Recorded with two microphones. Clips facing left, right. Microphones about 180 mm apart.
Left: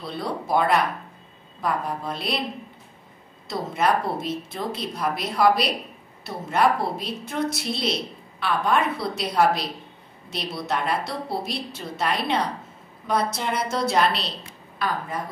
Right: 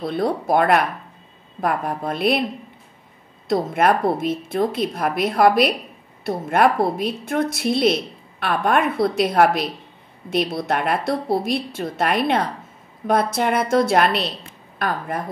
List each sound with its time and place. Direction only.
0.0 s a woman's voice: 50° right (ahead or behind)
3.4 s a woman's voice: 55° right (ahead or behind)